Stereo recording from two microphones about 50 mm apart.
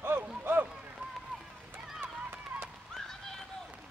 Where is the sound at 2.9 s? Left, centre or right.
Centre.